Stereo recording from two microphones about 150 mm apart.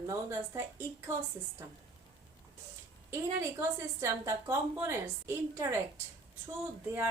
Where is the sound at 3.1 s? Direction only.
20° right (ahead or behind).